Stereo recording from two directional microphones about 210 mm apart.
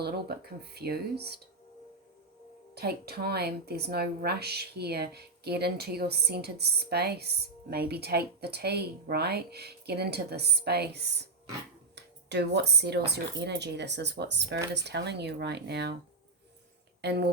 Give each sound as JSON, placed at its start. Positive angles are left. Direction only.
{"t": 0.0, "sound": "speech", "side_deg": -50}
{"t": 2.7, "sound": "speech", "side_deg": -50}
{"t": 17.0, "sound": "speech", "side_deg": -50}